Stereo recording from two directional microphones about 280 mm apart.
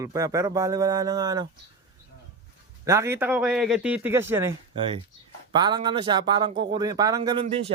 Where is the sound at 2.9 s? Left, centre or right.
Centre.